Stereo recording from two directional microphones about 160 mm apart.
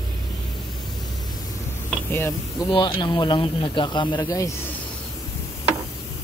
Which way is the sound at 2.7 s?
30° left (ahead or behind).